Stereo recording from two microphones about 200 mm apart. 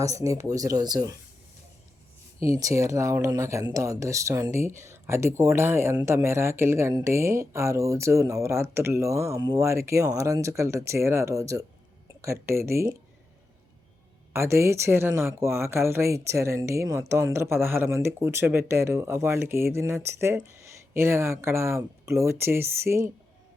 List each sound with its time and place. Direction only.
0.0 s speech: 15° right (ahead or behind)
2.6 s speech: 15° right (ahead or behind)
14.3 s speech: 15° right (ahead or behind)